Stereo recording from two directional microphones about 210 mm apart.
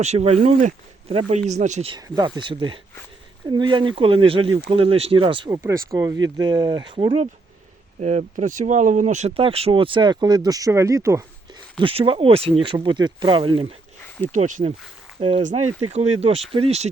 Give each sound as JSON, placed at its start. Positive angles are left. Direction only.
{"t": 0.0, "sound": "speech", "side_deg": -30}
{"t": 8.0, "sound": "speech", "side_deg": -35}
{"t": 11.8, "sound": "speech", "side_deg": -25}
{"t": 14.3, "sound": "speech", "side_deg": -35}